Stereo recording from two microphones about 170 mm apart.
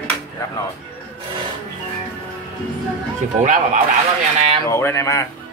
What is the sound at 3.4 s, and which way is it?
Speech, 45° right (ahead or behind).